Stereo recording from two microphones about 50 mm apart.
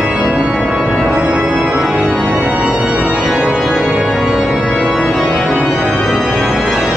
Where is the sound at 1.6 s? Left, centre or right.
Centre.